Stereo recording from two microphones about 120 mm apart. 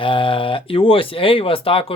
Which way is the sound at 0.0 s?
45° left (ahead or behind).